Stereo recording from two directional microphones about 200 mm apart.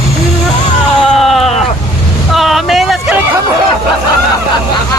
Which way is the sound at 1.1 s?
Centre (ahead or behind).